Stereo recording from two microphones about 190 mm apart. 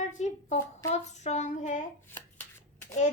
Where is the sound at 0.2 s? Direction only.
35° left (ahead or behind).